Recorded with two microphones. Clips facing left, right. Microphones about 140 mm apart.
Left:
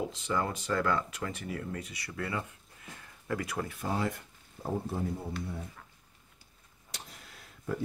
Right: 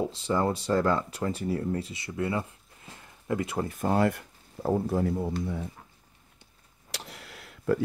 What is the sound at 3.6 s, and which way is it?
Speech, 50° right (ahead or behind).